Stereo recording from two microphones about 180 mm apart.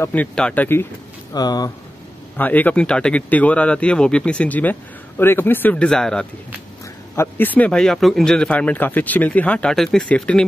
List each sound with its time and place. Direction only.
0.0 s speech: 10° left (ahead or behind)
1.3 s speech: 20° left (ahead or behind)
2.3 s speech: 10° left (ahead or behind)